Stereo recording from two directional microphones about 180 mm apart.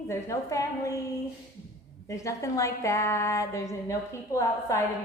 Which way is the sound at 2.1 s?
15° left (ahead or behind).